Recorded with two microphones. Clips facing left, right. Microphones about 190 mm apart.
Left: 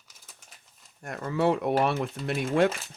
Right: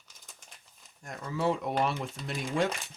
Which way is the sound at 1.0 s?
65° left (ahead or behind).